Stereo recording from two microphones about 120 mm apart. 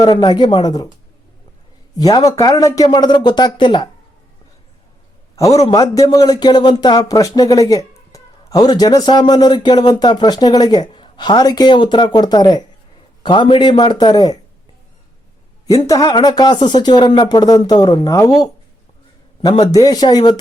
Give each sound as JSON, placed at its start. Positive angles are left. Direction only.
{"t": 0.0, "sound": "a man's voice", "side_deg": 40}
{"t": 2.0, "sound": "a man's voice", "side_deg": 30}
{"t": 5.4, "sound": "a man's voice", "side_deg": 30}
{"t": 15.6, "sound": "a man's voice", "side_deg": 30}
{"t": 19.4, "sound": "a man's voice", "side_deg": 35}